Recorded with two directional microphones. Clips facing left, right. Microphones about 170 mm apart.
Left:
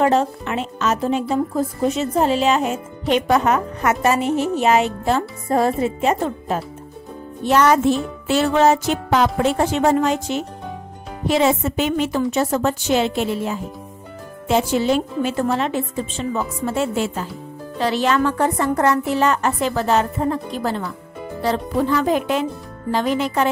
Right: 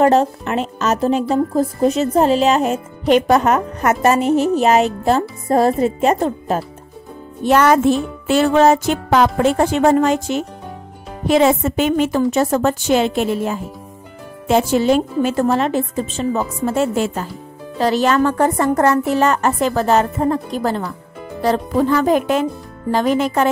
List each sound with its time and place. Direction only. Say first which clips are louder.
0.0 s speech: right 4 dB; 40° right (ahead or behind)
7.4 s a woman's voice: right 2 dB; 55° right (ahead or behind)